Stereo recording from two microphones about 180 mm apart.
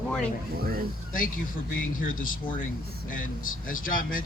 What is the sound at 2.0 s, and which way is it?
Speech, 50° left (ahead or behind).